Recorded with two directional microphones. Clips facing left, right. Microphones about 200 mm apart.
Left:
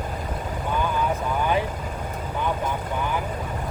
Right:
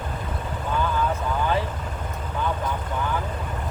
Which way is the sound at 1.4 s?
15° left (ahead or behind).